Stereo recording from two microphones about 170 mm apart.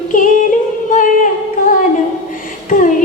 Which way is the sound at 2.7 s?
50° left (ahead or behind).